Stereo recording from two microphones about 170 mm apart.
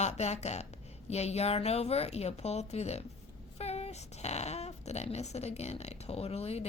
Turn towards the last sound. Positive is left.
turn(degrees=35)  # may be behind; listen again after turning